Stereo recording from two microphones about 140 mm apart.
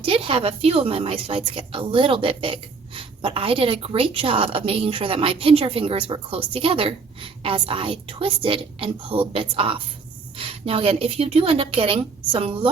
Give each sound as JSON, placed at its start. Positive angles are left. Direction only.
{"t": 0.0, "sound": "a woman's voice", "side_deg": -40}